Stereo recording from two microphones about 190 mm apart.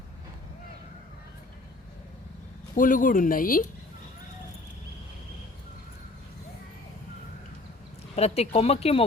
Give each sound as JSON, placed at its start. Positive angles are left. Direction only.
{"t": 2.7, "sound": "speech", "side_deg": 45}
{"t": 8.1, "sound": "speech", "side_deg": 35}